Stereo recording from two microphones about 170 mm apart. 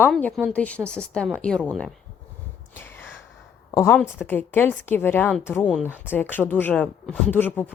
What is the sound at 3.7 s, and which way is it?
Speech, 15° left (ahead or behind).